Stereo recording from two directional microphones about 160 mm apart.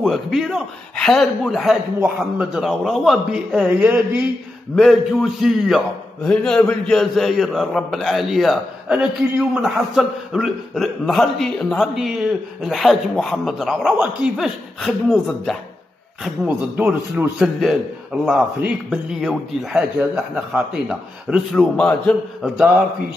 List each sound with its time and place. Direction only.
0.0 s a man's voice: centre (ahead or behind)
16.4 s a man's voice: 10° right (ahead or behind); by 22.5 s 5° left (ahead or behind)